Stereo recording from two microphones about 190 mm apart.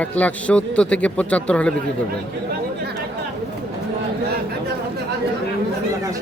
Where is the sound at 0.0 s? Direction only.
10° left (ahead or behind).